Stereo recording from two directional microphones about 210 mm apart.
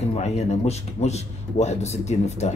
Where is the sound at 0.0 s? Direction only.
30° left (ahead or behind).